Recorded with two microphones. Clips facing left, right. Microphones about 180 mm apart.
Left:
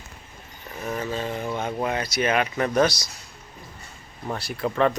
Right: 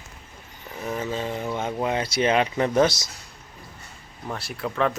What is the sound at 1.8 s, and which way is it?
Speech, 25° right (ahead or behind).